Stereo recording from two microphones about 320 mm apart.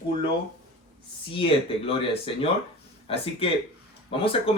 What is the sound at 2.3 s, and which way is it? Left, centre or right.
Speech, centre.